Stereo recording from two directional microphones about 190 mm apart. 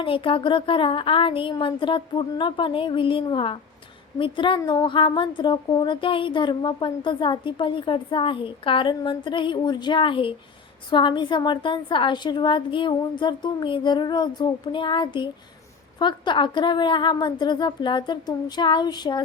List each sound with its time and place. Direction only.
0.0 s a woman's voice: 30° left (ahead or behind)